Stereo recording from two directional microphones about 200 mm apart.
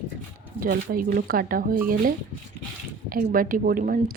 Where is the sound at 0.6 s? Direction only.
45° right (ahead or behind).